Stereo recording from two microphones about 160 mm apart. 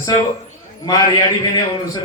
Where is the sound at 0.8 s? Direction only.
25° left (ahead or behind).